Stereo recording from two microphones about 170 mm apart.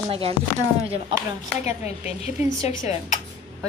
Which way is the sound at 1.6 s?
40° left (ahead or behind).